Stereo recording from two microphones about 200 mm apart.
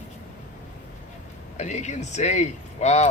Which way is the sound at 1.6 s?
35° left (ahead or behind).